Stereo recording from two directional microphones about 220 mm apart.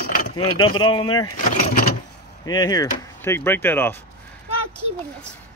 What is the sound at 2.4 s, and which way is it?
Speech, 15° left (ahead or behind).